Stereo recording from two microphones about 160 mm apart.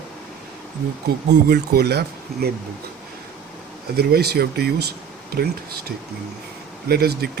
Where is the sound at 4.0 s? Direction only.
80° right.